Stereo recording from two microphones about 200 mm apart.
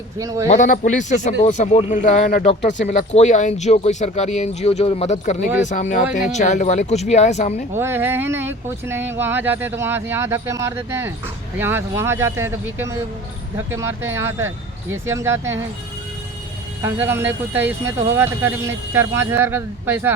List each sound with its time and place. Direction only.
0.2 s speech: 15° right (ahead or behind)
0.5 s speech: 40° left (ahead or behind)
7.8 s speech: 10° right (ahead or behind)
16.8 s speech: 10° right (ahead or behind)